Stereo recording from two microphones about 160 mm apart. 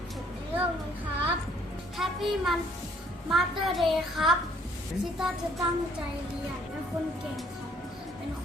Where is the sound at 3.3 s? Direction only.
Centre (ahead or behind).